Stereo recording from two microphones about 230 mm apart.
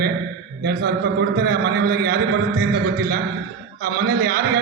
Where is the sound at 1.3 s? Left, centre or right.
Right.